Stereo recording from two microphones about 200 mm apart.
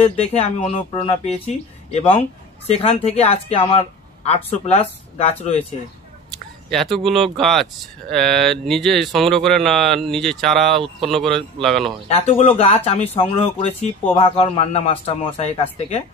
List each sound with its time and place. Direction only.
0.0 s speech: 30° left (ahead or behind)
6.7 s speech: centre (ahead or behind)
12.1 s a man's voice: 30° left (ahead or behind)